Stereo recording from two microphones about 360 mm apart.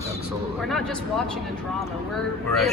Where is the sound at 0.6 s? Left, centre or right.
Centre.